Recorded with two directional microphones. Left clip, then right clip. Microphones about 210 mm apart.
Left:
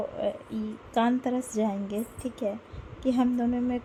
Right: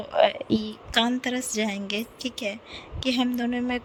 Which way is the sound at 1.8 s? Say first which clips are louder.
Right 4 dB; 40° right (ahead or behind).